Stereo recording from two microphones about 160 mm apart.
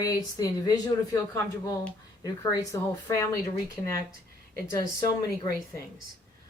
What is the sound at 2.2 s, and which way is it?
Speech, 20° left (ahead or behind).